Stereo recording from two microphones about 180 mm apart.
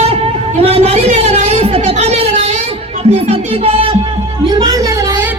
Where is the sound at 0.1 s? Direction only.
35° right (ahead or behind).